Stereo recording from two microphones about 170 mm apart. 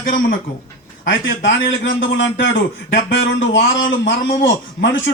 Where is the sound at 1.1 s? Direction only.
90° left.